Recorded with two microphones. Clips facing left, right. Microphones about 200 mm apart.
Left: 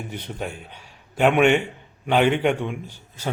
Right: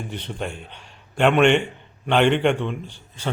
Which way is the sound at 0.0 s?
10° left (ahead or behind).